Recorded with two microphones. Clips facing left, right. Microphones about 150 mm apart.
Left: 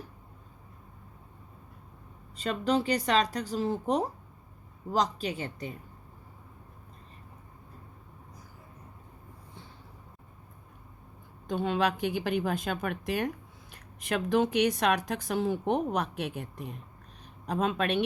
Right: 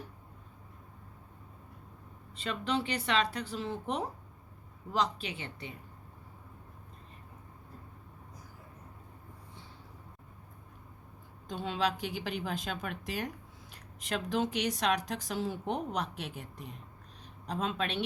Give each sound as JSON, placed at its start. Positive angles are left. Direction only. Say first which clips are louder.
{"t": 2.3, "sound": "speech", "louder": "left 5 dB", "side_deg": 40}
{"t": 11.4, "sound": "a woman's voice", "louder": "left 5 dB", "side_deg": 55}